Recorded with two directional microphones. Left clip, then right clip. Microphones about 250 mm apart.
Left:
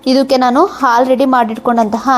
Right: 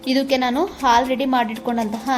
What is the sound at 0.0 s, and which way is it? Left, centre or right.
A woman's voice, left.